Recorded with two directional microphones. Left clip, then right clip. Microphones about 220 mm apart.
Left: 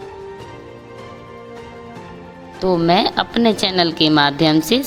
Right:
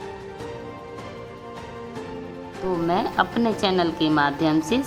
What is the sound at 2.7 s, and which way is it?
Speech, 35° left (ahead or behind).